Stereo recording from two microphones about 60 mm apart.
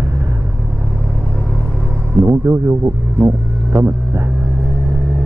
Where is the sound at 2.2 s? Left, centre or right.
Right.